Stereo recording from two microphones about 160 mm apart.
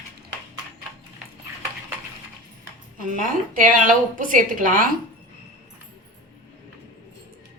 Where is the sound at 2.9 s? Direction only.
60° right (ahead or behind).